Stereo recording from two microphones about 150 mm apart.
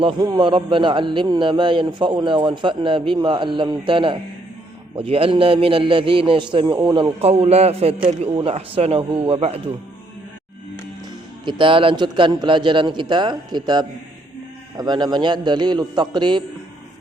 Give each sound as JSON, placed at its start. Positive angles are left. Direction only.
{"t": 0.0, "sound": "a man's voice", "side_deg": -30}
{"t": 11.4, "sound": "a man's voice", "side_deg": -35}